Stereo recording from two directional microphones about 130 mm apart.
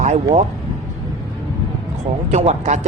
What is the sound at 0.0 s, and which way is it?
Speech, 60° right (ahead or behind).